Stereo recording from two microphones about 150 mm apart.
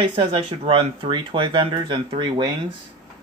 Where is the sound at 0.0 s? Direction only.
35° right (ahead or behind).